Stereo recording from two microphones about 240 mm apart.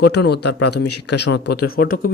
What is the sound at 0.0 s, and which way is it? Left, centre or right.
Speech, left.